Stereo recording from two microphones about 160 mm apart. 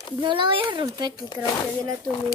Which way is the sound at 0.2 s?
30° right (ahead or behind).